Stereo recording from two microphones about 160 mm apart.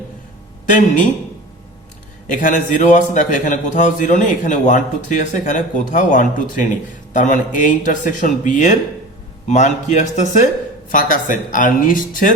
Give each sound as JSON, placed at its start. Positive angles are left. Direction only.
{"t": 2.2, "sound": "a man's voice", "side_deg": 55}